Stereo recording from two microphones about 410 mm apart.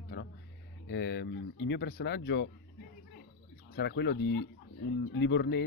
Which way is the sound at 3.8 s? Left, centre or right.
Left.